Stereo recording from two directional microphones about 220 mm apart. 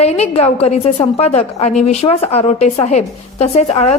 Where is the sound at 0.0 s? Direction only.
30° left (ahead or behind).